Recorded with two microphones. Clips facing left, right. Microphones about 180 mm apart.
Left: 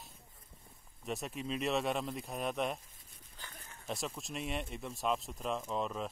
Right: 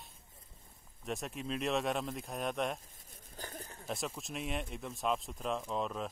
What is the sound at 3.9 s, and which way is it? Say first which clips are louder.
Speech: even; centre (ahead or behind).